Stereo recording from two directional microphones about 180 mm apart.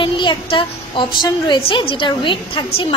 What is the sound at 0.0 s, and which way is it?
A child's voice, 25° left (ahead or behind).